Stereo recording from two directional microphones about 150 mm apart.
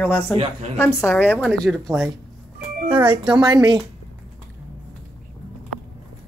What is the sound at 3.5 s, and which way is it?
Speech, 25° right (ahead or behind).